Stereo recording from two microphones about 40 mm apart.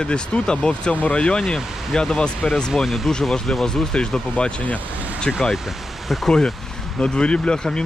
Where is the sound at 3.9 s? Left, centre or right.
Left.